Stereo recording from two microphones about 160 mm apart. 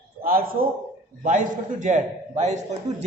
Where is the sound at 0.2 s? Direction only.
65° right (ahead or behind).